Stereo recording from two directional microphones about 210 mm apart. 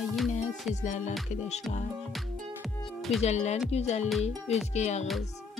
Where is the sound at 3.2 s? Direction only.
30° left (ahead or behind).